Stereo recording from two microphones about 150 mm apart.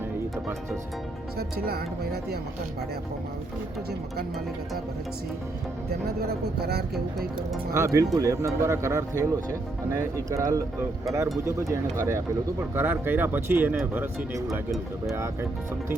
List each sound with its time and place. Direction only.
1.4 s speech: 90° right
6.1 s speech: 90° right
6.9 s speech: centre (ahead or behind)
7.7 s speech: 20° right (ahead or behind)